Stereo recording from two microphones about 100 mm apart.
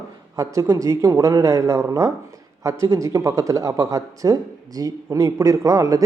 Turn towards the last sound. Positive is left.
turn(degrees=-35)  # may be behind; listen again after turning